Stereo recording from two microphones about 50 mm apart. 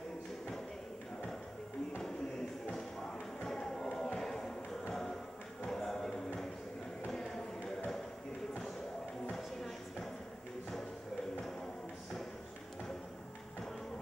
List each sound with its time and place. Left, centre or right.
3.4 s music: centre
5.7 s music: centre